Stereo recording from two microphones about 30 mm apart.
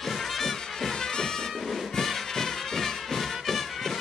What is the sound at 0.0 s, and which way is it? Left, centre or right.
Music, centre.